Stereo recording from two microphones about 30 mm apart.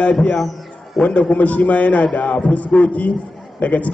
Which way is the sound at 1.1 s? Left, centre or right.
Left.